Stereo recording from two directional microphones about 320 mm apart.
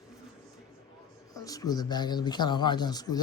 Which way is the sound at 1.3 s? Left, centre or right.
Centre.